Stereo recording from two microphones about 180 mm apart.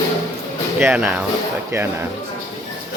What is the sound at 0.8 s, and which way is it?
Speech, 10° right (ahead or behind).